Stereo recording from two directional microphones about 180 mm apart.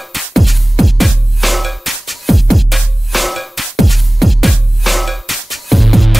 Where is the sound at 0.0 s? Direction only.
Centre (ahead or behind).